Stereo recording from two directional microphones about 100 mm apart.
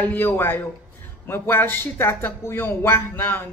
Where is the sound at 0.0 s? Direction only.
20° left (ahead or behind).